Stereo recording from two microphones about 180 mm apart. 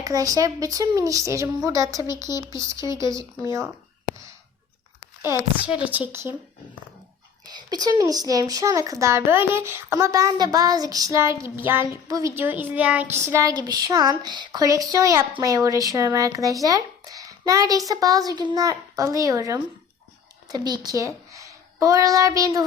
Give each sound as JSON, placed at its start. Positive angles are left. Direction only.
{"t": 0.0, "sound": "child singing", "side_deg": -20}
{"t": 2.3, "sound": "a woman's voice", "side_deg": -15}
{"t": 5.2, "sound": "a woman's voice", "side_deg": -10}
{"t": 7.5, "sound": "child singing", "side_deg": -20}
{"t": 11.4, "sound": "a woman's voice", "side_deg": -15}
{"t": 12.0, "sound": "child singing", "side_deg": -20}
{"t": 20.5, "sound": "a child's voice", "side_deg": -20}